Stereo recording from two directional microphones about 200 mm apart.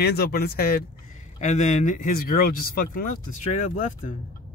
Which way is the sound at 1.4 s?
35° left (ahead or behind).